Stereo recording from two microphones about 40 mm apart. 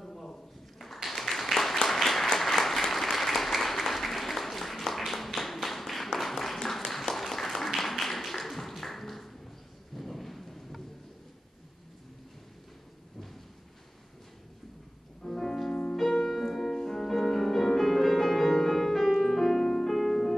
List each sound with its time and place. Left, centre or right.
0.0 s a sound: centre
2.3 s applause: centre
9.9 s thunder: centre
15.2 s music: centre
15.7 s music: left
16.0 s music: centre